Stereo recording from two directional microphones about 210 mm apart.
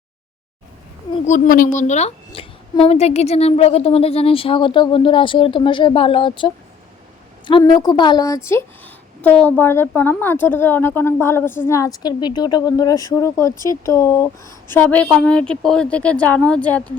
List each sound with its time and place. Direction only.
1.5 s a woman's voice: 40° left (ahead or behind); by 16.9 s 5° left (ahead or behind)